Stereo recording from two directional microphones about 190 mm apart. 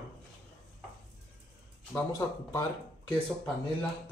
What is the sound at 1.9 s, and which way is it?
Speech, 15° left (ahead or behind).